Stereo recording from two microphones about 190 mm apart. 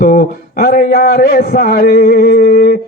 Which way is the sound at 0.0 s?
50° left (ahead or behind).